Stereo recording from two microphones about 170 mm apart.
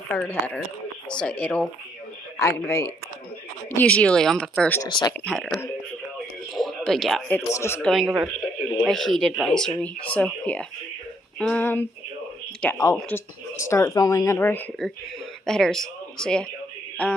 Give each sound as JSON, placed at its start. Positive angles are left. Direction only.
{"t": 0.2, "sound": "speech", "side_deg": 10}
{"t": 4.8, "sound": "speech", "side_deg": 25}
{"t": 5.1, "sound": "speech", "side_deg": 5}
{"t": 6.5, "sound": "speech", "side_deg": 0}
{"t": 7.8, "sound": "speech", "side_deg": 0}